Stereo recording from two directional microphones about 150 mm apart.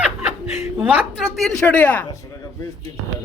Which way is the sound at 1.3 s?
5° left (ahead or behind).